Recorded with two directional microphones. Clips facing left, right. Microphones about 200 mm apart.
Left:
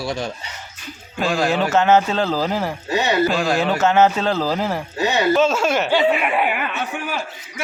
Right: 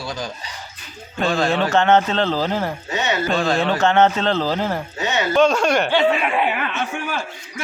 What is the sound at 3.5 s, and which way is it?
Speech, 5° left (ahead or behind).